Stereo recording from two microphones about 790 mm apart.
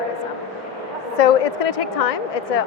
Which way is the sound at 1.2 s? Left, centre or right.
Left.